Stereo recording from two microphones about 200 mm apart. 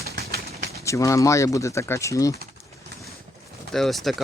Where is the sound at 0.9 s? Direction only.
15° left (ahead or behind).